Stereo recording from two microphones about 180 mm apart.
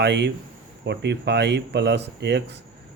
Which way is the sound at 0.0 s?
70° right (ahead or behind).